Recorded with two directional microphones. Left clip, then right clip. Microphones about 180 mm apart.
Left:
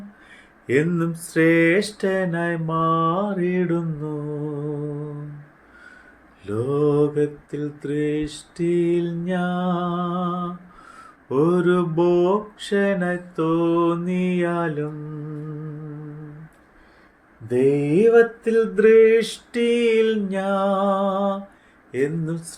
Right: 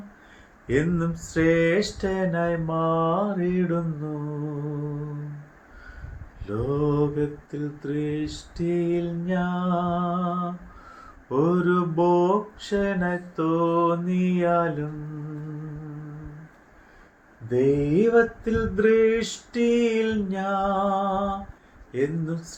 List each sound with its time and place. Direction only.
0.7 s mantra: 50° left (ahead or behind)
6.4 s mantra: 45° left (ahead or behind)
17.5 s mantra: 50° left (ahead or behind)